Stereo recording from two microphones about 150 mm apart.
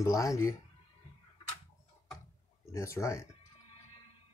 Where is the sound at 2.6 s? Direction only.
20° left (ahead or behind).